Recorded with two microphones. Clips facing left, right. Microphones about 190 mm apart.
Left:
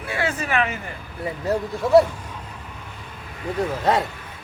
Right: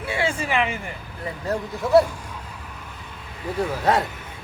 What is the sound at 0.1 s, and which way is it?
Speech, 25° right (ahead or behind).